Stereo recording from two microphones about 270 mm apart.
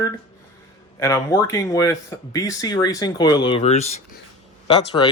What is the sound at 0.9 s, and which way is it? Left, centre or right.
Speech, centre.